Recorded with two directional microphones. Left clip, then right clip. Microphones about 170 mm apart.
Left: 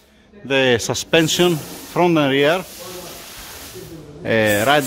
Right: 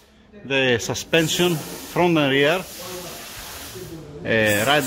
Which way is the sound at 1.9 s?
15° left (ahead or behind).